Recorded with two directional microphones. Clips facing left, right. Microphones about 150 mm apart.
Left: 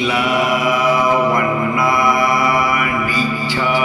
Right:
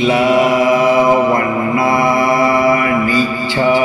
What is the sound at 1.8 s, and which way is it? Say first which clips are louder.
Mantra: right 3 dB; 30° right (ahead or behind).